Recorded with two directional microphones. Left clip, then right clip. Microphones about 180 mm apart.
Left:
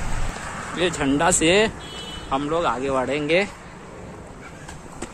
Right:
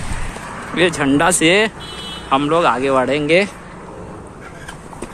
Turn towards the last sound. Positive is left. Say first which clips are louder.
# right 6 dB
turn(degrees=-5)  # may be behind; listen again after turning